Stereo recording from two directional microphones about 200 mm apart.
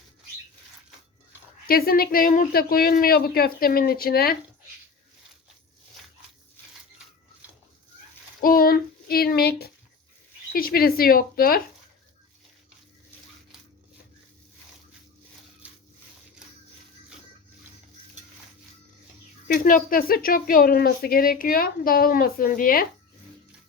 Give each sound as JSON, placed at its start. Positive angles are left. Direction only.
{"t": 1.6, "sound": "speech", "side_deg": 45}
{"t": 8.4, "sound": "child singing", "side_deg": 45}
{"t": 10.5, "sound": "speech", "side_deg": 50}
{"t": 19.5, "sound": "speech", "side_deg": 45}